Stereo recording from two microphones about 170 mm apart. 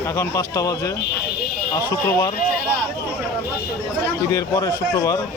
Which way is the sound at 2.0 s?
15° left (ahead or behind).